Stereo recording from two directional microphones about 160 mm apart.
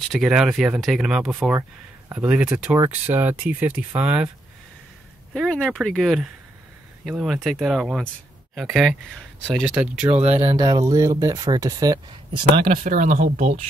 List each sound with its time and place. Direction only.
0.1 s speech: centre (ahead or behind)
5.3 s speech: 5° left (ahead or behind)
9.5 s speech: 5° right (ahead or behind)
10.1 s speech: 40° right (ahead or behind)
10.6 s speech: 25° right (ahead or behind)
12.6 s speech: 55° right (ahead or behind)